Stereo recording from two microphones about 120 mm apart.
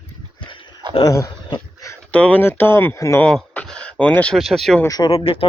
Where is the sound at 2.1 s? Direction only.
15° left (ahead or behind).